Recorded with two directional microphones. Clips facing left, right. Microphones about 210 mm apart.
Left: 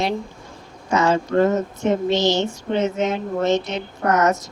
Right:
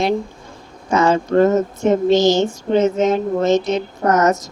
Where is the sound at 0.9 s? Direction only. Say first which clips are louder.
Right 3 dB; 50° right (ahead or behind).